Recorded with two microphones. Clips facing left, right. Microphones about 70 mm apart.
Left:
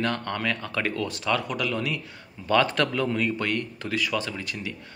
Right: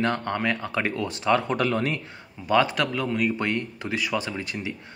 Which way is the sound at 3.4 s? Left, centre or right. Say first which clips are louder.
Right 1 dB; right.